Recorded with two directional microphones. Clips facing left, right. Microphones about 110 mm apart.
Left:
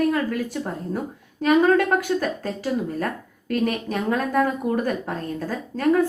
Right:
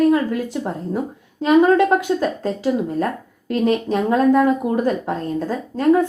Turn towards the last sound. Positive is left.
turn(degrees=-20)  # may be behind; listen again after turning